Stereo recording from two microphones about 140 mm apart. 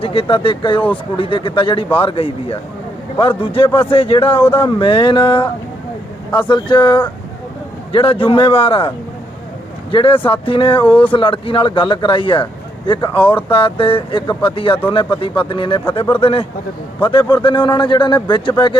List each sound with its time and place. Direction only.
0.0 s speech: 40° left (ahead or behind)
6.5 s speech: 35° left (ahead or behind)
9.9 s speech: 40° left (ahead or behind)